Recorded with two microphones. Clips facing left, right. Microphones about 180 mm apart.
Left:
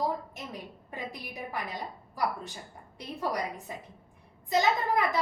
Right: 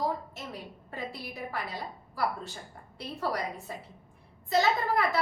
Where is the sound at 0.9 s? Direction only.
15° left (ahead or behind).